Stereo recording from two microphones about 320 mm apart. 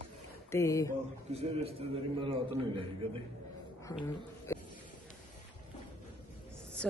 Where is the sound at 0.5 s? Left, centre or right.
Centre.